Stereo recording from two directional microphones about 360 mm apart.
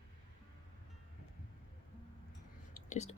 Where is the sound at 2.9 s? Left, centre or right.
Centre.